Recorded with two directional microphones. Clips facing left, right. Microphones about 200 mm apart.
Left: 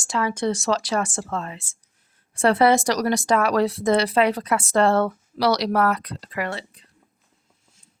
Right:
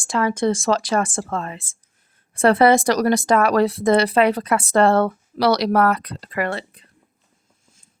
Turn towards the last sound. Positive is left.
turn(degrees=-55)  # may be behind; listen again after turning